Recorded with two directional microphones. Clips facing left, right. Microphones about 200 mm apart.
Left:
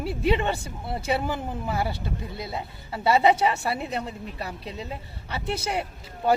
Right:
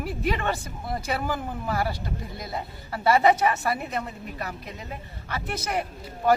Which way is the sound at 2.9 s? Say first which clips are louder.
Even; 25° left (ahead or behind).